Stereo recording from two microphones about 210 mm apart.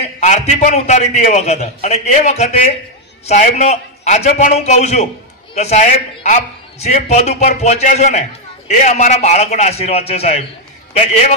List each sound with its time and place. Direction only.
0.0 s a man's voice: 35° left (ahead or behind)